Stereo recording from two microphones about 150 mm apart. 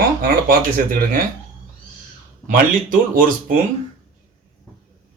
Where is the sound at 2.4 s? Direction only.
65° right (ahead or behind).